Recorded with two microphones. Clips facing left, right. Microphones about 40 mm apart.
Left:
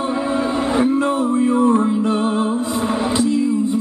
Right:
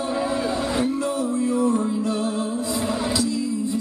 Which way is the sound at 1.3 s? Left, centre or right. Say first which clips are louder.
Left 6 dB; left.